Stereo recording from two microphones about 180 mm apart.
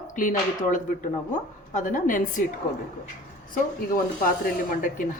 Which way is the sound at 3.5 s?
50° left (ahead or behind).